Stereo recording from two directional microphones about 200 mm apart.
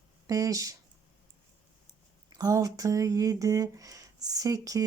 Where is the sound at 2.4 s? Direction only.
15° right (ahead or behind).